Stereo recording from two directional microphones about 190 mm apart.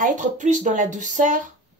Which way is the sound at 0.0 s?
40° right (ahead or behind).